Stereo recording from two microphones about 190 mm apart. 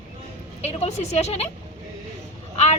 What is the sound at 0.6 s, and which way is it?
Speech, 35° left (ahead or behind).